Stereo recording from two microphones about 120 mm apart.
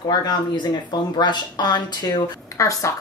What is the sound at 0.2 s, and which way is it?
A woman's voice, 35° left (ahead or behind).